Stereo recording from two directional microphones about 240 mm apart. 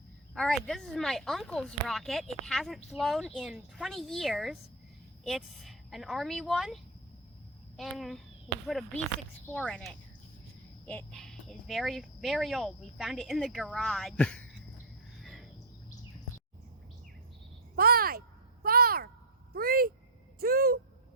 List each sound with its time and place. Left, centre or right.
0.3 s speech: centre
7.8 s a child's voice: centre
15.2 s cricket: centre
17.7 s a sound: right